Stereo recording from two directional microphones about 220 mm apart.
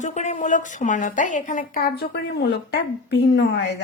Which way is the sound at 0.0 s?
30° left (ahead or behind).